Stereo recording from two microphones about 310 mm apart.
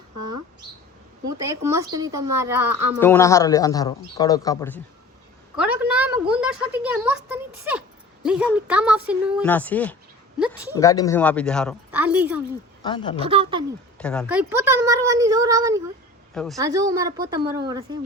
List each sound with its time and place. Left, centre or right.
1.4 s speech: centre
3.0 s a man's voice: centre
5.5 s a woman's voice: centre
12.8 s a man's voice: centre
13.2 s speech: centre
14.0 s speech: centre
16.3 s a woman's voice: centre
16.6 s speech: centre